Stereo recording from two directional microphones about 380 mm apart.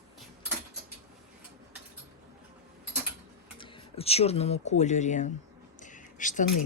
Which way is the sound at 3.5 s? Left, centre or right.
Centre.